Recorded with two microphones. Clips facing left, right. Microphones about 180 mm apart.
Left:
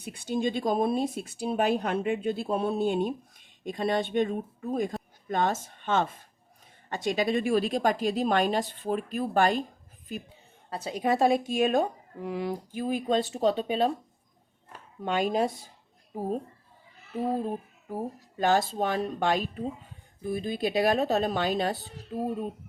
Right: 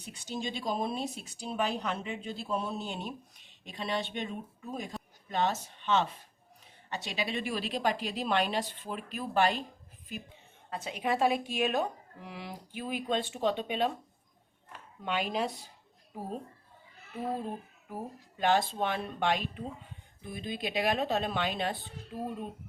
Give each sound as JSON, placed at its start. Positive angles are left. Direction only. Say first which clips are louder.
{"t": 0.0, "sound": "speech", "louder": "left 9 dB", "side_deg": 55}
{"t": 10.7, "sound": "speech", "louder": "left 5 dB", "side_deg": 35}
{"t": 18.3, "sound": "speech", "louder": "left 3 dB", "side_deg": 40}